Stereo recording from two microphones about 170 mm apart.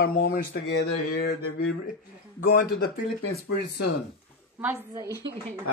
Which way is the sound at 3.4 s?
75° left (ahead or behind).